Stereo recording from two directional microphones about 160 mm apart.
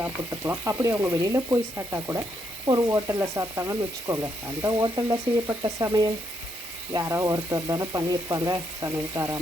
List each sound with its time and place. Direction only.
0.0 s speech: 15° right (ahead or behind)
2.6 s sizzle: 20° right (ahead or behind)